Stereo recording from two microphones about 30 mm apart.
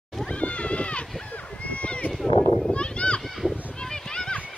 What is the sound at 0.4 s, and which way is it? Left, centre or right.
Cat, left.